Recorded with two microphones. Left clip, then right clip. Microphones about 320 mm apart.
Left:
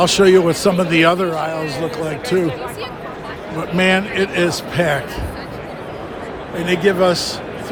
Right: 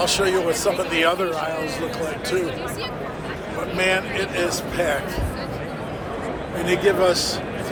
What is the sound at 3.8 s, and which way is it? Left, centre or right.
A man's voice, left.